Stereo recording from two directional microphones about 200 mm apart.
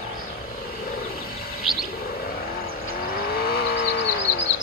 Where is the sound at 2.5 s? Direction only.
45° left (ahead or behind); by 4.5 s 65° left (ahead or behind).